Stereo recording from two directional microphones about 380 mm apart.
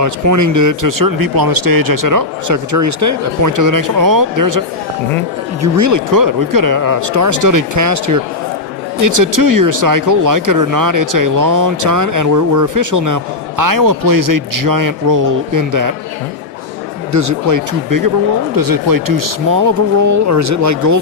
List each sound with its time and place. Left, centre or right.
0.0 s speech: right
5.7 s a man's voice: right
17.1 s speech: right
18.5 s speech: right